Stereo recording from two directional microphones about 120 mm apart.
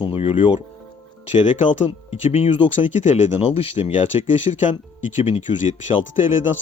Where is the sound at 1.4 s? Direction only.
85° left.